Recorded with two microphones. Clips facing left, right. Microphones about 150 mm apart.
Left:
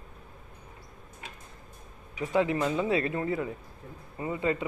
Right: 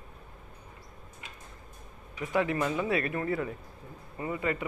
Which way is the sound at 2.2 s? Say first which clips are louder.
Left 2 dB; 20° left (ahead or behind).